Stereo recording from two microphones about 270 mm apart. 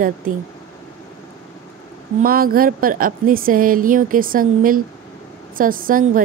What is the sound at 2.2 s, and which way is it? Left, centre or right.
A woman's voice, right.